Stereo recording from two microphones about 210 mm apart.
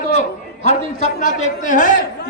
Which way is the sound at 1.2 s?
40° left (ahead or behind).